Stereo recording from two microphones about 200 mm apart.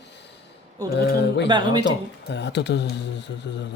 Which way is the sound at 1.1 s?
60° left (ahead or behind).